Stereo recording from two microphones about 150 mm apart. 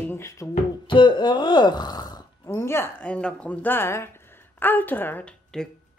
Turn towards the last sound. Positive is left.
turn(degrees=5)  # may be behind; listen again after turning